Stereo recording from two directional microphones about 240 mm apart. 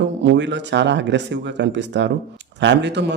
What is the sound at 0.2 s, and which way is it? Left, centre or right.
Speech, right.